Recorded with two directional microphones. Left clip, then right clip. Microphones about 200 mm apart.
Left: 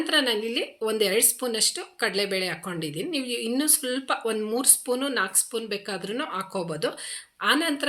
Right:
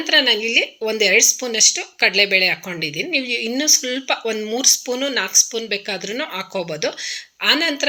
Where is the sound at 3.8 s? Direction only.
Centre (ahead or behind).